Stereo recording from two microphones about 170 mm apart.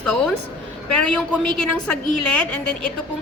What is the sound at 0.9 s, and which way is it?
A woman's voice, 5° left (ahead or behind).